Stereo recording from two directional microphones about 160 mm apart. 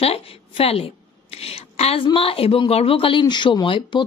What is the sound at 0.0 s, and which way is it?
A woman's voice, 40° left (ahead or behind).